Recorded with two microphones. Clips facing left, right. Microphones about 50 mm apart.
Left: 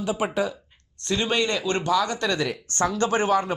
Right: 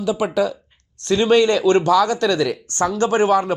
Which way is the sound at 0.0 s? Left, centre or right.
Left.